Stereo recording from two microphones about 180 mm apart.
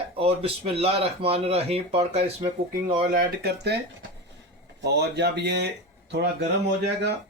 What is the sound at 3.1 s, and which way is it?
Speech, 60° right (ahead or behind).